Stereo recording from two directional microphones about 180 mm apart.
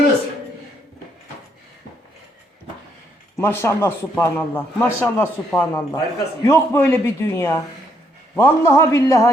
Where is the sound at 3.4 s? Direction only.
15° left (ahead or behind).